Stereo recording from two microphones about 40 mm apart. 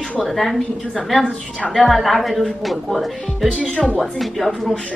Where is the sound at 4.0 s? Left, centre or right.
Centre.